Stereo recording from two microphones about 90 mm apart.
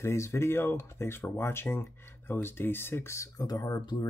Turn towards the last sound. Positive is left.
turn(degrees=45)  # may be behind; listen again after turning